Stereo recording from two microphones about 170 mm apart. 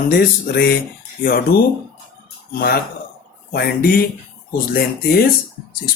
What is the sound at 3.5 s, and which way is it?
Speech, 65° left (ahead or behind).